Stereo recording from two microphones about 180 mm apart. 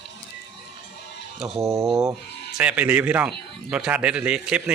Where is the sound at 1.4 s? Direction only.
Centre (ahead or behind).